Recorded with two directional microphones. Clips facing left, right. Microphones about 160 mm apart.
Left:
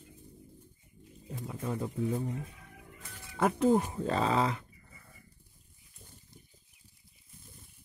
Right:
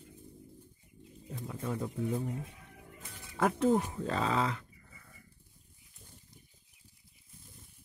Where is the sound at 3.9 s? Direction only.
25° left (ahead or behind).